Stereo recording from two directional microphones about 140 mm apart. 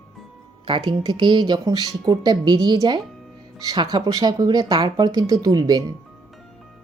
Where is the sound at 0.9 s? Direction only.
35° right (ahead or behind).